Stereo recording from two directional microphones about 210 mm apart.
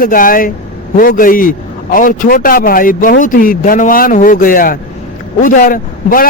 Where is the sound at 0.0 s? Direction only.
40° left (ahead or behind).